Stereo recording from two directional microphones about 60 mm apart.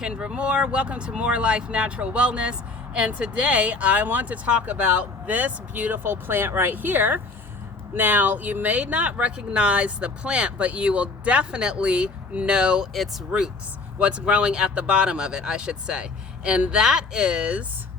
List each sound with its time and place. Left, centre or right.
0.0 s speech: centre
6.0 s speech: right; by 12.9 s centre
14.0 s speech: centre